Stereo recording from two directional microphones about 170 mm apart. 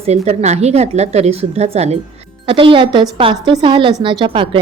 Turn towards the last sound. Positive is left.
turn(degrees=-30)  # may be behind; listen again after turning